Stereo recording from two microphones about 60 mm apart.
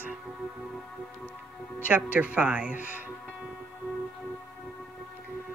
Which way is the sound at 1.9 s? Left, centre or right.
Right.